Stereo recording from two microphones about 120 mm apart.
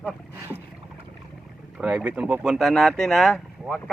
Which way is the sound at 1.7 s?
10° right (ahead or behind).